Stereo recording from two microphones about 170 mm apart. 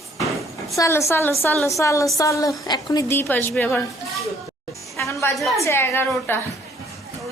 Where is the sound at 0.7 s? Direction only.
15° left (ahead or behind).